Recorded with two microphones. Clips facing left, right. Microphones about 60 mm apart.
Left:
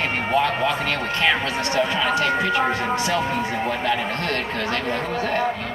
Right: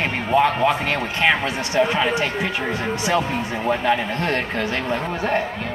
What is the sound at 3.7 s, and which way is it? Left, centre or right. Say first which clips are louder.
Speech: right 3 dB; right.